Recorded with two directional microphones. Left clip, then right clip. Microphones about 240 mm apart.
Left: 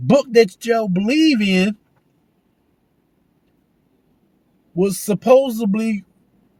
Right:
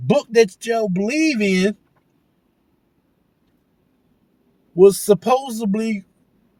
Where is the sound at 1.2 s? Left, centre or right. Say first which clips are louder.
Left 1 dB; left.